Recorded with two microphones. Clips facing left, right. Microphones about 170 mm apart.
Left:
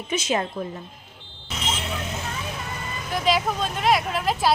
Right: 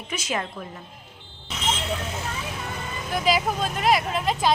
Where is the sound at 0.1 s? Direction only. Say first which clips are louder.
Left 5 dB; 25° left (ahead or behind).